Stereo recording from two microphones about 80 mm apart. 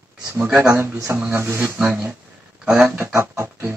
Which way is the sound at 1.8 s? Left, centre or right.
Centre.